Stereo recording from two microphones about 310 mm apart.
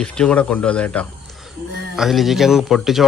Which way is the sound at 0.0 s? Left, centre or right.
Centre.